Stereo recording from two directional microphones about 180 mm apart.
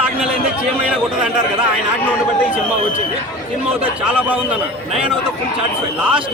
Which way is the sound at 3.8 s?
10° right (ahead or behind).